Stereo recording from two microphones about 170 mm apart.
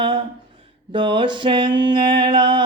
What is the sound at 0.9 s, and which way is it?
Mantra, 30° right (ahead or behind).